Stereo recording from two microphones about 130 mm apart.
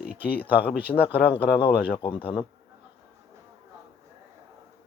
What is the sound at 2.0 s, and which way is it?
Speech, 40° left (ahead or behind).